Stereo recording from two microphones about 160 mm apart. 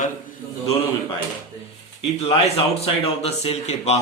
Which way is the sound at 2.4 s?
40° left (ahead or behind).